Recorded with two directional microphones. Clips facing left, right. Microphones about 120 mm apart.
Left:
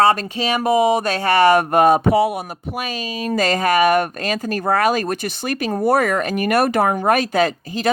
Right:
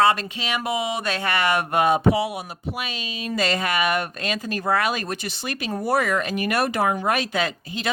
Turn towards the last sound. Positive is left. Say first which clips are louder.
# left 7 dB
turn(degrees=45)  # may be behind; listen again after turning